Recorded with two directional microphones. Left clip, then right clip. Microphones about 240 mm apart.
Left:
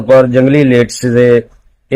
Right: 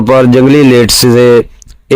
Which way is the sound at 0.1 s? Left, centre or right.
Right.